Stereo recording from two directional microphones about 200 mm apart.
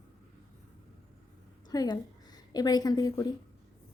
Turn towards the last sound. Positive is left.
turn(degrees=20)  # may be behind; listen again after turning